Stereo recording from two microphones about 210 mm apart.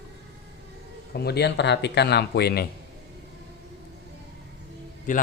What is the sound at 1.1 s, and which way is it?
Speech, 50° left (ahead or behind).